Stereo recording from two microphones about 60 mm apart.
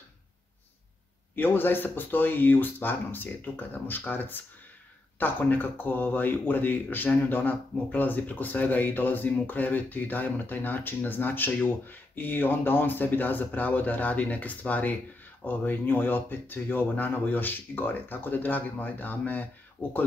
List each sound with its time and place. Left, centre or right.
1.3 s speech: left